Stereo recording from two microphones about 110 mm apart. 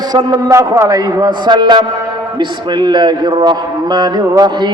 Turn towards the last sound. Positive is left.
turn(degrees=-40)  # may be behind; listen again after turning